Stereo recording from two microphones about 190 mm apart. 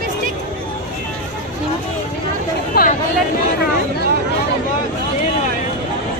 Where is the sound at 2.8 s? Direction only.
55° left (ahead or behind).